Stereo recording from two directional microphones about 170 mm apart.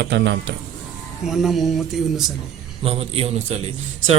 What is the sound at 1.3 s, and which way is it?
Speech, centre (ahead or behind).